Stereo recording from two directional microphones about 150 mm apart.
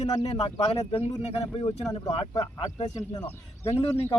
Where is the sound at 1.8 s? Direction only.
25° left (ahead or behind).